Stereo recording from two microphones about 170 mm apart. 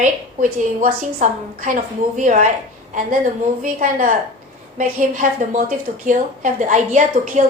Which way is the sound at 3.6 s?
50° right (ahead or behind).